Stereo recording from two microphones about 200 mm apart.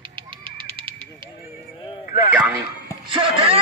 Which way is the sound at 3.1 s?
25° right (ahead or behind).